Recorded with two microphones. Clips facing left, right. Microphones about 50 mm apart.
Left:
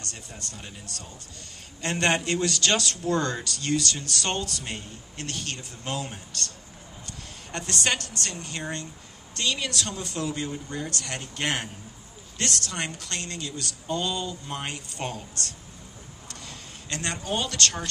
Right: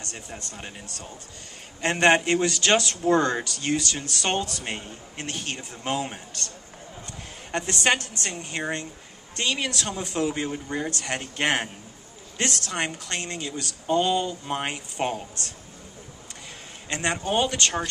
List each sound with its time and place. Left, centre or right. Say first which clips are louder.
0.0 s speech: right 2 dB; right
7.5 s speech: right 4 dB; right
16.9 s speech: right 5 dB; right